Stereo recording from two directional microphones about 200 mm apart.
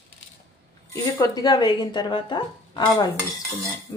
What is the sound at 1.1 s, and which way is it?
Speech, 15° left (ahead or behind).